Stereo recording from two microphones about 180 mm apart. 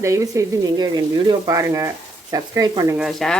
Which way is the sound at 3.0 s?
Centre (ahead or behind).